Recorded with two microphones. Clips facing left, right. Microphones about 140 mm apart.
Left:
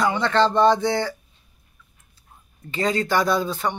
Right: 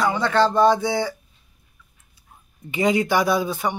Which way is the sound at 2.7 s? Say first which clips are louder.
Right 2 dB; 15° right (ahead or behind).